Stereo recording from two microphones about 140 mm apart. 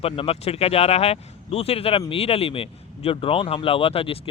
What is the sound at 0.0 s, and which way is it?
Speech, 45° left (ahead or behind).